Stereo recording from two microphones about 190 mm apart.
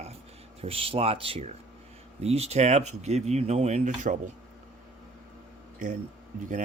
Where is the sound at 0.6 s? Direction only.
30° right (ahead or behind).